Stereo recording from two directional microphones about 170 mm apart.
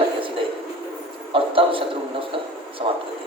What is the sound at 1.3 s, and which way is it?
Speech, 30° right (ahead or behind).